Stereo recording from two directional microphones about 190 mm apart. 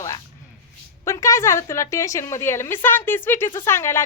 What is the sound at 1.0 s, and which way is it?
A woman's voice, 15° left (ahead or behind).